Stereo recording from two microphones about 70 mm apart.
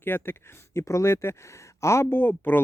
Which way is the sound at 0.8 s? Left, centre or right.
Left.